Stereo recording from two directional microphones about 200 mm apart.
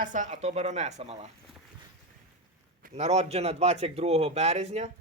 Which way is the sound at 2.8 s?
35° right (ahead or behind).